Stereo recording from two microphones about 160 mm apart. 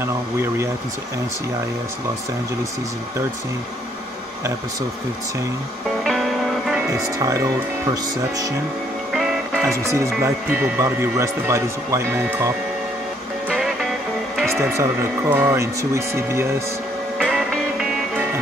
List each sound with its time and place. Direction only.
0.0 s speech: 15° right (ahead or behind)
6.0 s music: centre (ahead or behind)
6.8 s speech: 20° right (ahead or behind)
9.1 s speech: 5° right (ahead or behind)
14.6 s speech: 15° right (ahead or behind)
17.2 s music: 5° right (ahead or behind)